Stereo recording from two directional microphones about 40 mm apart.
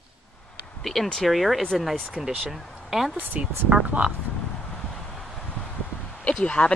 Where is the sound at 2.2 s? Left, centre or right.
Centre.